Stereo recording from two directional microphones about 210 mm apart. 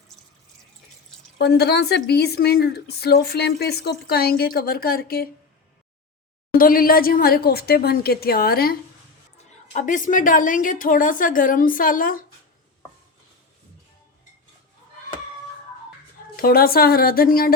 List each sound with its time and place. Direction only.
1.4 s a woman's voice: 50° left (ahead or behind)
6.5 s a woman's voice: 40° left (ahead or behind)
16.4 s a woman's voice: 45° left (ahead or behind)